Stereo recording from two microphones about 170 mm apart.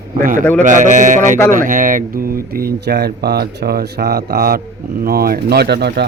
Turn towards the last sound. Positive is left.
turn(degrees=-75)  # may be behind; listen again after turning